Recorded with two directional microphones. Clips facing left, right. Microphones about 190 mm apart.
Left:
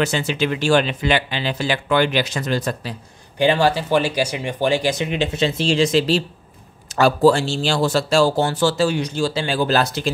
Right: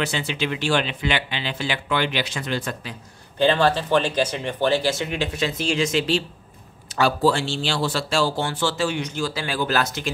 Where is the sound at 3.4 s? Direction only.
10° left (ahead or behind).